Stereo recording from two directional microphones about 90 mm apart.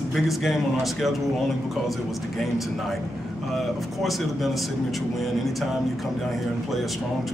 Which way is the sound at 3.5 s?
Centre (ahead or behind).